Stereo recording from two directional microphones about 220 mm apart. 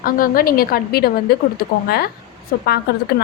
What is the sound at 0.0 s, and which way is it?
A woman's voice, 40° left (ahead or behind).